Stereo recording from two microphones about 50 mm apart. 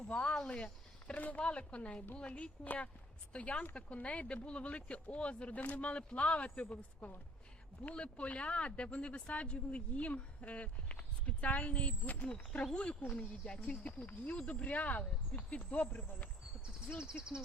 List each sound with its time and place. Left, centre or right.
0.1 s speech: left
17.0 s speech: centre